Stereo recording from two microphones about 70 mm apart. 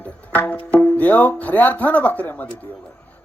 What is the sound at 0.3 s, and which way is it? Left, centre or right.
Speech, left.